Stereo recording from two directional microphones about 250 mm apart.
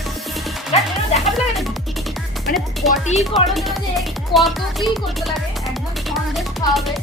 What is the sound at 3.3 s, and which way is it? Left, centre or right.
Speech, centre.